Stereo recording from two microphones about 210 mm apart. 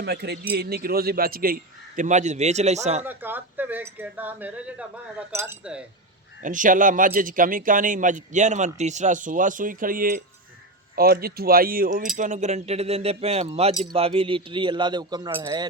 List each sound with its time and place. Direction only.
0.0 s a man's voice: 50° right (ahead or behind); by 3.0 s 30° right (ahead or behind)
3.0 s speech: 10° right (ahead or behind)
6.4 s a man's voice: 40° right (ahead or behind); by 15.6 s 20° right (ahead or behind)